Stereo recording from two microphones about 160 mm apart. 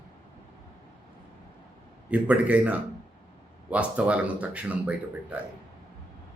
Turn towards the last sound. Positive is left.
turn(degrees=-10)  # may be behind; listen again after turning